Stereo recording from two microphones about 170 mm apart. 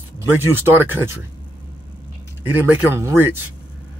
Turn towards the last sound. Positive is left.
turn(degrees=-15)  # may be behind; listen again after turning